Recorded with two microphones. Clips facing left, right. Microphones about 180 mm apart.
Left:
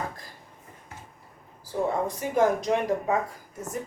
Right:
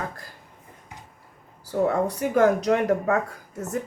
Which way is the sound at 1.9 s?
70° right (ahead or behind).